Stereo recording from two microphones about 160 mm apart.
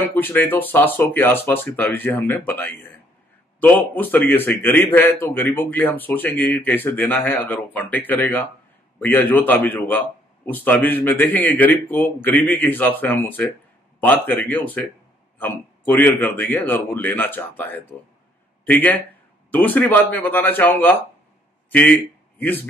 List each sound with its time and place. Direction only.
0.0 s speech: 10° left (ahead or behind)
3.9 s speech: 10° left (ahead or behind)